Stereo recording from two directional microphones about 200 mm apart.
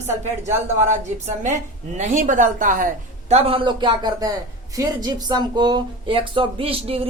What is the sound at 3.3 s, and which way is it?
Speech, 30° right (ahead or behind).